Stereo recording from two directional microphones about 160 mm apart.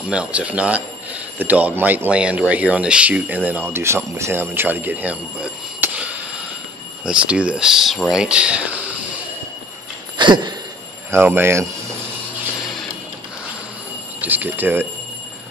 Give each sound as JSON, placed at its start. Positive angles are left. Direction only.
{"t": 0.1, "sound": "speech", "side_deg": -5}
{"t": 10.1, "sound": "a sound", "side_deg": -30}
{"t": 11.1, "sound": "speech", "side_deg": -15}
{"t": 14.2, "sound": "speech", "side_deg": -10}